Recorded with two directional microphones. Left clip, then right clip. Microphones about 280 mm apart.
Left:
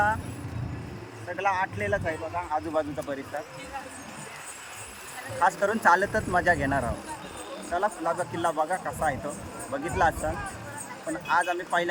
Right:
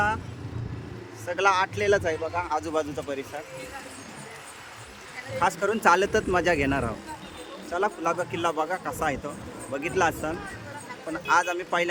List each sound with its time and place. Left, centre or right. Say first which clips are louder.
1.3 s speech: right 4 dB; centre
5.4 s speech: even; centre